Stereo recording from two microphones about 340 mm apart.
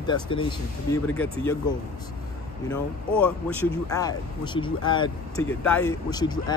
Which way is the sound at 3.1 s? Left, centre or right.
Centre.